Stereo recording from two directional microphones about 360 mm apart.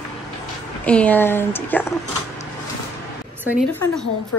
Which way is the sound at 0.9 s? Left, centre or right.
Centre.